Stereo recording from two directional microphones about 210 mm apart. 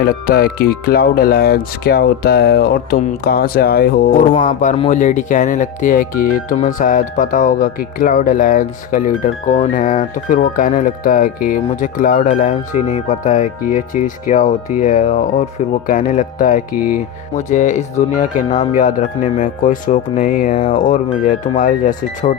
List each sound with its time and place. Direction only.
0.0 s speech: 45° left (ahead or behind)